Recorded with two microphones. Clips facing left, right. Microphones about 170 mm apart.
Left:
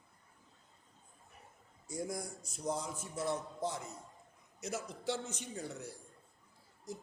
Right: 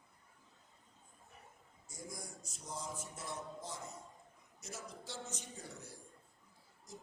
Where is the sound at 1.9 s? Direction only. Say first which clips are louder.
Left 11 dB; 65° left (ahead or behind).